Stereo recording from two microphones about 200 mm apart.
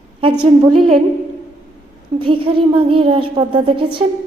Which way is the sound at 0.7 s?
Centre (ahead or behind).